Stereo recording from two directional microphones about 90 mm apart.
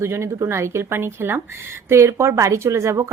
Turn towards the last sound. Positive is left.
turn(degrees=-30)  # may be behind; listen again after turning